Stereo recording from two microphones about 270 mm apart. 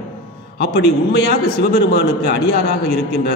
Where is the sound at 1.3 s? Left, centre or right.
Left.